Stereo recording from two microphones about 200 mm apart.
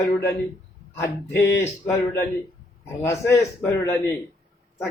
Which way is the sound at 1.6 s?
15° left (ahead or behind).